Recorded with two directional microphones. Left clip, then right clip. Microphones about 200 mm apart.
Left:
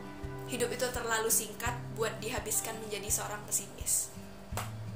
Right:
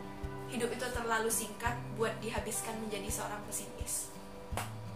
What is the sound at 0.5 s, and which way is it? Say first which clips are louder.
A woman's voice: left 3 dB; 45° left (ahead or behind).